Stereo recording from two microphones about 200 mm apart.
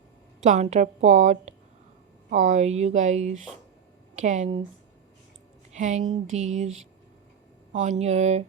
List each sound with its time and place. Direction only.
0.4 s a woman's voice: 35° right (ahead or behind)
5.7 s speech: 40° right (ahead or behind)
7.7 s speech: 35° right (ahead or behind)